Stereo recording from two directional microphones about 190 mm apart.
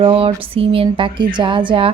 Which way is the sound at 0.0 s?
30° right (ahead or behind).